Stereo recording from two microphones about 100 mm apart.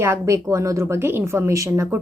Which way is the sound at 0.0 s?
30° right (ahead or behind).